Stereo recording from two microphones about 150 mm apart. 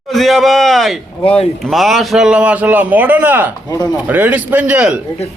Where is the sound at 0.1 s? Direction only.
Centre (ahead or behind).